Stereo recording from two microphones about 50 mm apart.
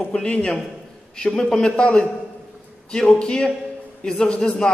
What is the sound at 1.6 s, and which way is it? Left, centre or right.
A man's voice, left.